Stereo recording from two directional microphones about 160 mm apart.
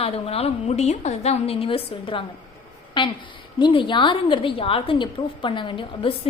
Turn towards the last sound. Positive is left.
turn(degrees=35)  # may be behind; listen again after turning